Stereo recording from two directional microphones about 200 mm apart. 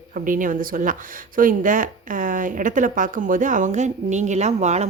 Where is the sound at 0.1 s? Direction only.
40° right (ahead or behind).